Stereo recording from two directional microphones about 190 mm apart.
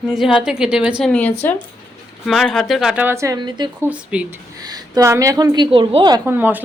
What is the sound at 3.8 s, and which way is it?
Speech, 5° right (ahead or behind).